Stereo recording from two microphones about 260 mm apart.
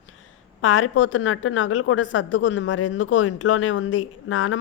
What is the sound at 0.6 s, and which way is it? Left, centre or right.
A woman's voice, left.